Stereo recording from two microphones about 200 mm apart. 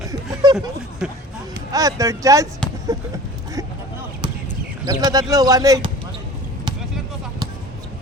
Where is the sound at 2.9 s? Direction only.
15° right (ahead or behind).